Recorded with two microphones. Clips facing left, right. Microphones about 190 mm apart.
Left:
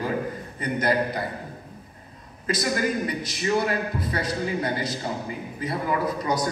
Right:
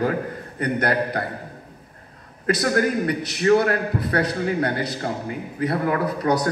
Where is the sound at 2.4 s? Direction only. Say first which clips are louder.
Right 5 dB; 65° right (ahead or behind).